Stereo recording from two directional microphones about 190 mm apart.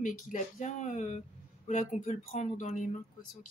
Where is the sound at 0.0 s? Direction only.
40° left (ahead or behind).